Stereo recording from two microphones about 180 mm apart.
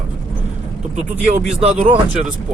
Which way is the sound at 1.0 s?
40° right (ahead or behind).